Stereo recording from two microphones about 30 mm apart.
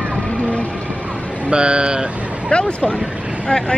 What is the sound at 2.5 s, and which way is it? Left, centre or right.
Speech, left.